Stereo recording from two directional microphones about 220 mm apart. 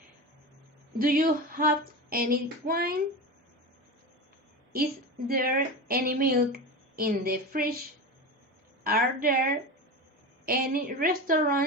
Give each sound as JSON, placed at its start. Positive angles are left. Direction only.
{"t": 0.9, "sound": "speech", "side_deg": -40}
{"t": 5.3, "sound": "speech", "side_deg": -40}
{"t": 8.8, "sound": "speech", "side_deg": -40}